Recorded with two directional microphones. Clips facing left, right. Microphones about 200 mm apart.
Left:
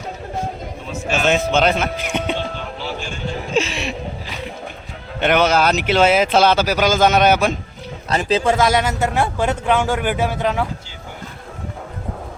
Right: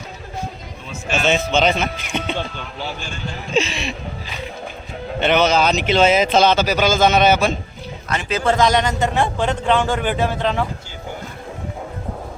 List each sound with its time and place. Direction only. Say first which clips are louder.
1.3 s speech: left 1 dB; 5° left (ahead or behind)
3.5 s music: right 1 dB; 5° left (ahead or behind)
5.2 s speech: left 1 dB; 10° left (ahead or behind)
8.1 s speech: left 5 dB; 35° left (ahead or behind)
8.4 s speech: right 4 dB; 10° left (ahead or behind)